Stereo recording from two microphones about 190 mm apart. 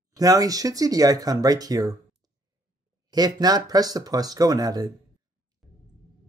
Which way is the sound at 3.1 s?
20° right (ahead or behind).